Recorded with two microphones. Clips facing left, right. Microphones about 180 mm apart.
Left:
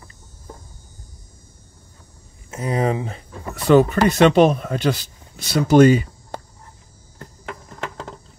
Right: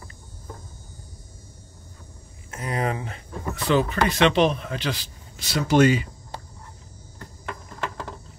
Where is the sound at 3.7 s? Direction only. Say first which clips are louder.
Left 8 dB; 50° left (ahead or behind).